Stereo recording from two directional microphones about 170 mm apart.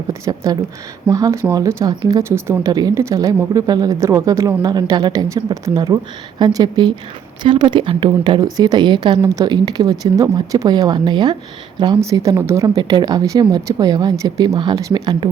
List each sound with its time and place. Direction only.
0.1 s speech: 20° right (ahead or behind)